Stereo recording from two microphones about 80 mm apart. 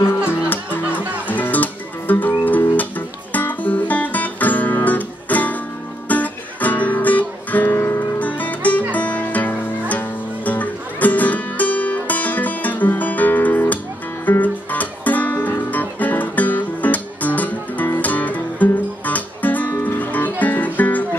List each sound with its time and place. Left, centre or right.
0.0 s music: left